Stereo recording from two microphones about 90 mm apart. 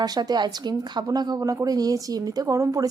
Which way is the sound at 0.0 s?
50° right (ahead or behind).